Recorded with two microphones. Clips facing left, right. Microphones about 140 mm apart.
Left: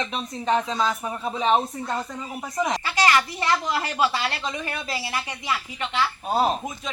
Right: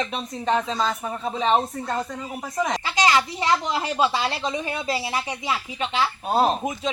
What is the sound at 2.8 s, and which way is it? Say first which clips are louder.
A woman's voice: right 1 dB; 20° right (ahead or behind).